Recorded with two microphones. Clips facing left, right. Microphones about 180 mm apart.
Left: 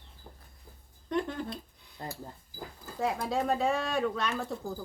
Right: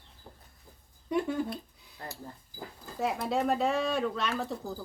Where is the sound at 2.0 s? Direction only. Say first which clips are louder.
Left 3 dB; 20° left (ahead or behind).